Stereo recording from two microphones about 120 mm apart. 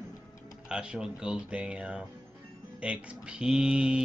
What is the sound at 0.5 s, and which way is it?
Speech, 10° right (ahead or behind).